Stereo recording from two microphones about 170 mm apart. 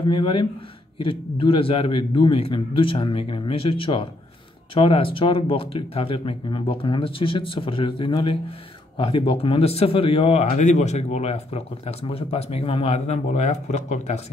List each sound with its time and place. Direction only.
0.0 s speech: 30° left (ahead or behind)